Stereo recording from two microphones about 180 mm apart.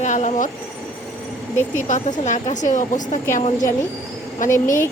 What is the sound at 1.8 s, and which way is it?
A woman's voice, 45° left (ahead or behind).